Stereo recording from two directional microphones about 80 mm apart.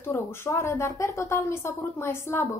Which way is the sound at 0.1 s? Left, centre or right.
Left.